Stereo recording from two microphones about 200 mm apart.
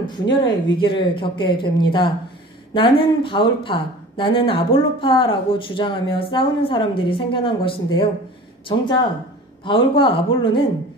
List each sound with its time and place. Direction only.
0.0 s a woman's voice: 25° left (ahead or behind)
9.7 s a woman's voice: 25° left (ahead or behind)